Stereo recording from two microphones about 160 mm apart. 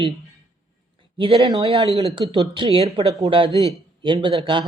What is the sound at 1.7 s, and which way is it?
Speech, 35° right (ahead or behind).